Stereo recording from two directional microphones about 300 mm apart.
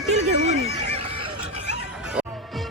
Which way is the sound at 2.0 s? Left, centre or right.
Centre.